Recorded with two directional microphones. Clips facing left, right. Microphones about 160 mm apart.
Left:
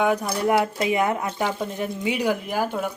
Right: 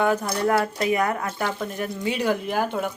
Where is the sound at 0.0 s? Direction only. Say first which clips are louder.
Even; 10° left (ahead or behind).